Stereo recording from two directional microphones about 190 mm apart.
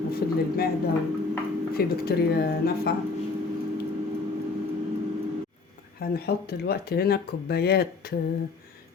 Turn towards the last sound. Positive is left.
turn(degrees=55)  # may be behind; listen again after turning